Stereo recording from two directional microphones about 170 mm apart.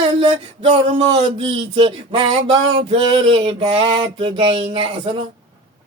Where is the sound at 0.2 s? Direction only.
35° right (ahead or behind).